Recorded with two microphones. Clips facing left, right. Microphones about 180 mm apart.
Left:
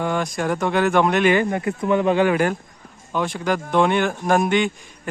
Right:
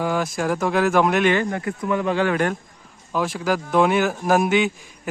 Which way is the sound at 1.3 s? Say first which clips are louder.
Left 2 dB; 15° left (ahead or behind).